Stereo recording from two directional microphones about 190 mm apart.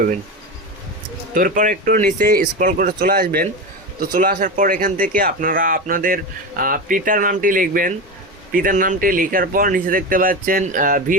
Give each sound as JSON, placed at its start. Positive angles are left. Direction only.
{"t": 1.3, "sound": "speech", "side_deg": -45}